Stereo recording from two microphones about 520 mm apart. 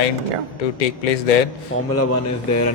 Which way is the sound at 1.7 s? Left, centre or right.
Left.